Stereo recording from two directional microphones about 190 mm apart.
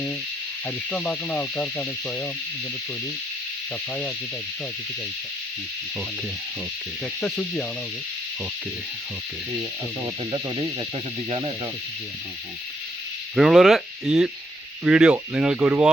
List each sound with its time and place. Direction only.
0.9 s speech: 5° left (ahead or behind)
7.2 s speech: 5° left (ahead or behind)
10.3 s speech: 25° right (ahead or behind)
13.3 s speech: centre (ahead or behind)